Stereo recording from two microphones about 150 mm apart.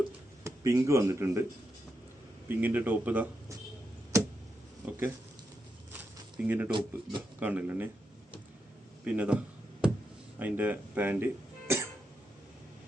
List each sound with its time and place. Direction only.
0.4 s speech: 20° right (ahead or behind)
2.5 s speech: 10° right (ahead or behind)
4.1 s a sound: 20° right (ahead or behind)
4.8 s speech: 10° right (ahead or behind)
5.9 s a sound: 10° right (ahead or behind)
6.7 s speech: 35° right (ahead or behind)
7.3 s speech: 10° right (ahead or behind)
9.1 s speech: 10° right (ahead or behind)
9.8 s a sound: 5° right (ahead or behind)
10.3 s speech: 10° right (ahead or behind)